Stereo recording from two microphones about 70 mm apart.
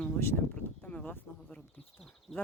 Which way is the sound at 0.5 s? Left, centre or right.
Left.